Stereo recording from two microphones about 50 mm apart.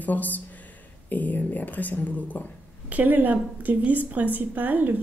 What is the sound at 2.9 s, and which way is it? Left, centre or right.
A woman's voice, right.